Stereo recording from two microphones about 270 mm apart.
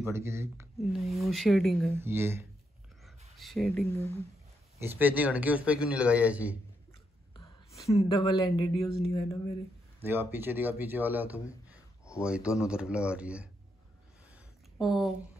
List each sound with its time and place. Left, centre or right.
0.0 s speech: centre
4.7 s speech: centre
8.0 s speech: centre
10.0 s speech: centre
11.6 s a sound: centre
12.6 s speech: centre
14.3 s a sound: centre